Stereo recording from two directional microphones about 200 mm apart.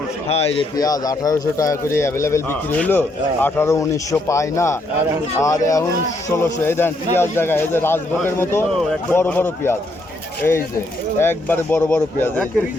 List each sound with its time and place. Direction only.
0.3 s a man's voice: 30° left (ahead or behind)
0.8 s a man's voice: 20° left (ahead or behind)
11.2 s a man's voice: 10° left (ahead or behind)